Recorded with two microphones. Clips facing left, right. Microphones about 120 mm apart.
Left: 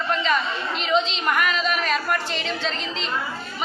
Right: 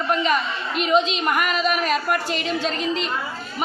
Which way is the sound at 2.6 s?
45° right (ahead or behind).